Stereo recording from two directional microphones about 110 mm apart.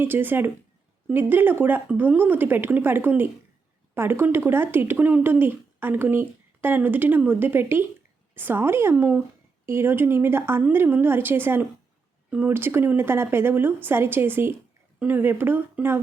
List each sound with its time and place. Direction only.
0.0 s speech: 20° right (ahead or behind)